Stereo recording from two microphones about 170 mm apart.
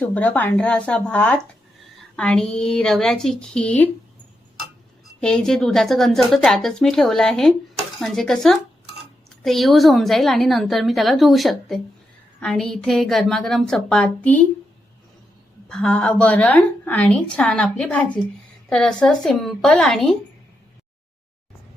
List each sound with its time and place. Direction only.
0.0 s a woman's voice: 10° left (ahead or behind)
5.2 s a woman's voice: 5° left (ahead or behind)
15.7 s a woman's voice: 5° left (ahead or behind)